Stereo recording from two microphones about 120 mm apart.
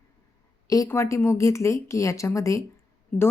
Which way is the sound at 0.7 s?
25° left (ahead or behind).